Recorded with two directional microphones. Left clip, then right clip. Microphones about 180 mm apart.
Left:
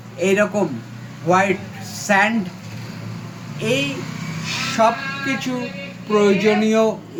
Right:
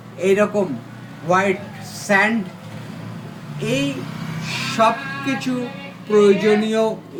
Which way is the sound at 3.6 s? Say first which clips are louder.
Left 2 dB; 55° left (ahead or behind).